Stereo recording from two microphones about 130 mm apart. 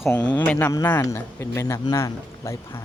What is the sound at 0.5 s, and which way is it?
A man's voice, 25° left (ahead or behind).